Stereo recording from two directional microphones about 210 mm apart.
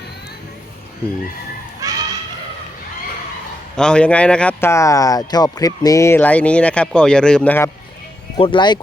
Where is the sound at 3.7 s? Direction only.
5° left (ahead or behind).